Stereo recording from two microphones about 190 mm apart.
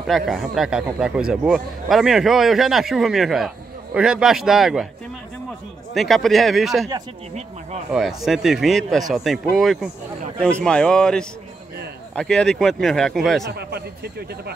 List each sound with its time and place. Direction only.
0.0 s speech: centre (ahead or behind)
5.9 s speech: centre (ahead or behind)
7.9 s speech: centre (ahead or behind)
13.5 s speech: 60° right (ahead or behind)